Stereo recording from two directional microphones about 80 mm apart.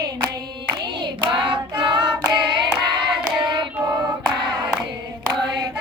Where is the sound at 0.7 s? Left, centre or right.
Right.